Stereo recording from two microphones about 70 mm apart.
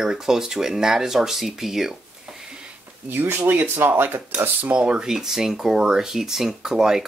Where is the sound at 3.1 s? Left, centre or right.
Right; by 7.0 s centre.